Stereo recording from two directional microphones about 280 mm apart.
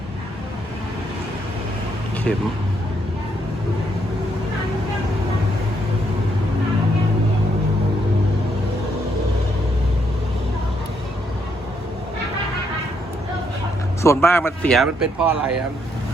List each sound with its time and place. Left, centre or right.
14.0 s speech: centre